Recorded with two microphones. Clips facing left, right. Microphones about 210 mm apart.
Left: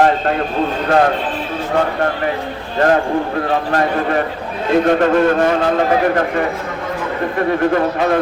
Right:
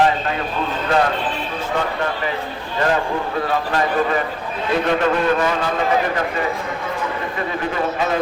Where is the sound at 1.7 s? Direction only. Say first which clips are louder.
Left 6 dB; 50° left (ahead or behind).